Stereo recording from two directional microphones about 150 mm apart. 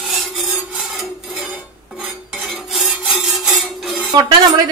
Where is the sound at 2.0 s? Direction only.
Centre (ahead or behind).